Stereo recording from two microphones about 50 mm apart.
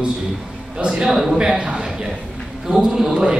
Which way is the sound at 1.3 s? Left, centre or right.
Centre.